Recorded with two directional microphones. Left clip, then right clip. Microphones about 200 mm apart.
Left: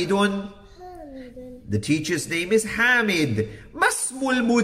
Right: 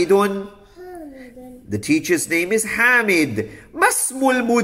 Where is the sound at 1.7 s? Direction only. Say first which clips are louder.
Right 6 dB; 10° right (ahead or behind).